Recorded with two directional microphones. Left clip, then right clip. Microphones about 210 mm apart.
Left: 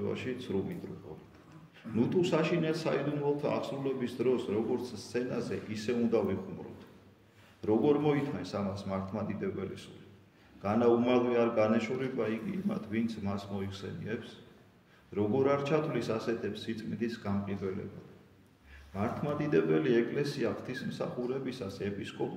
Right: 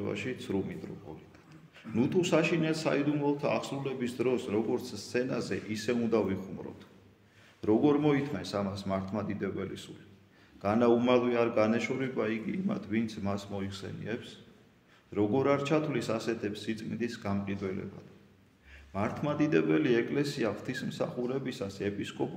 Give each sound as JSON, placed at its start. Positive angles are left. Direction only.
{"t": 0.0, "sound": "a man's voice", "side_deg": -55}
{"t": 2.0, "sound": "a man's voice", "side_deg": -55}
{"t": 7.6, "sound": "a man's voice", "side_deg": -50}
{"t": 18.9, "sound": "a man's voice", "side_deg": -50}